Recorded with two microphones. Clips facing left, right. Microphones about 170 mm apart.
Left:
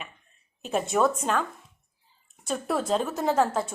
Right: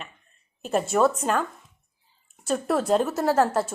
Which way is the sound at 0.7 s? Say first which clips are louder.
Right 2 dB; centre (ahead or behind).